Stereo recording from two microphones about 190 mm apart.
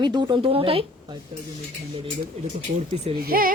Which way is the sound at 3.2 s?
50° right (ahead or behind).